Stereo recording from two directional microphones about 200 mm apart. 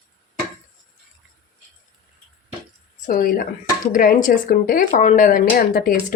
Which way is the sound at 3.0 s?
45° left (ahead or behind).